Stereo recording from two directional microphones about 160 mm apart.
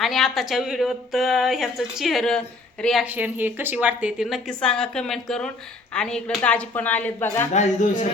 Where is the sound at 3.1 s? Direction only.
10° right (ahead or behind); by 7.4 s 15° left (ahead or behind).